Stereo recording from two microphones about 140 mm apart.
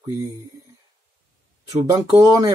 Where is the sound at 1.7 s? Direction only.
25° right (ahead or behind).